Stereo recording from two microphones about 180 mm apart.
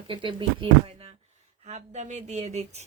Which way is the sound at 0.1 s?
30° right (ahead or behind).